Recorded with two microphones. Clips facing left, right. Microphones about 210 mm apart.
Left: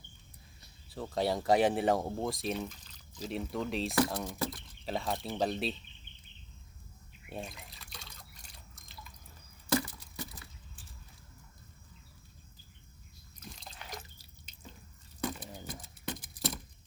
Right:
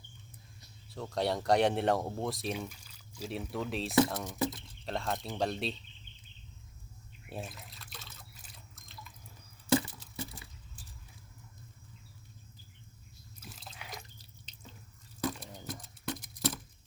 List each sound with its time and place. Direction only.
1.1 s speech: centre (ahead or behind)
4.4 s speech: 20° right (ahead or behind)
4.9 s speech: centre (ahead or behind)
7.3 s drip: centre (ahead or behind)
9.7 s a sound: 25° right (ahead or behind)
13.4 s liquid: 5° right (ahead or behind)
14.2 s drip: 10° left (ahead or behind)
15.2 s a sound: centre (ahead or behind)